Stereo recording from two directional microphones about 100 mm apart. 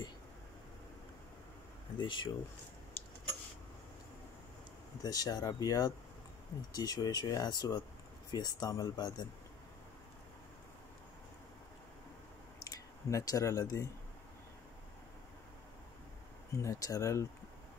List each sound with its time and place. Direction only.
2.0 s speech: 50° left (ahead or behind)
5.0 s speech: 40° left (ahead or behind)
12.6 s speech: 35° left (ahead or behind)
16.5 s speech: 30° left (ahead or behind)